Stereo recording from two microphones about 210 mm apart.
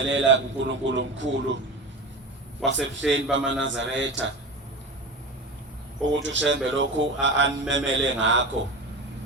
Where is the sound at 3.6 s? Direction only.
60° right (ahead or behind).